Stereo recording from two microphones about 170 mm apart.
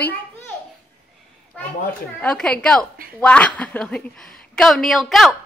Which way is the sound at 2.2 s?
5° left (ahead or behind).